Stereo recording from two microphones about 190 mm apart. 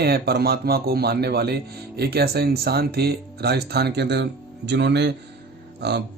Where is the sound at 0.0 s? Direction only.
55° right (ahead or behind).